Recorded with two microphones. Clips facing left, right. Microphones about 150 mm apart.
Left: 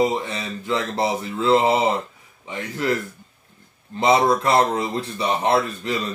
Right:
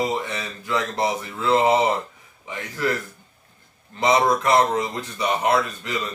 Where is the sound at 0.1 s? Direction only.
25° left (ahead or behind).